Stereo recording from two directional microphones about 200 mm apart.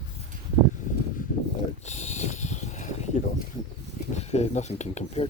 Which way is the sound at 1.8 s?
35° left (ahead or behind).